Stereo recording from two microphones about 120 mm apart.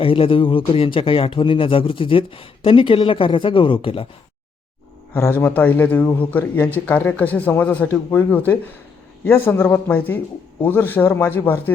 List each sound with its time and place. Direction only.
0.0 s speech: 50° left (ahead or behind)
5.1 s a man's voice: 20° left (ahead or behind)